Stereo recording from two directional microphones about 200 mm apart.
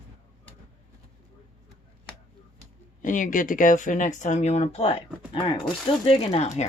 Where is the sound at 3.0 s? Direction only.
40° left (ahead or behind).